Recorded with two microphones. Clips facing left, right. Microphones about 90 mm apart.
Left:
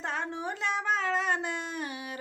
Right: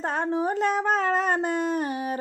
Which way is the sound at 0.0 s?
40° right (ahead or behind).